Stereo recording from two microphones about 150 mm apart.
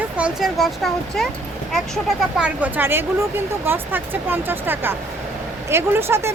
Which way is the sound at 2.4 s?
10° right (ahead or behind).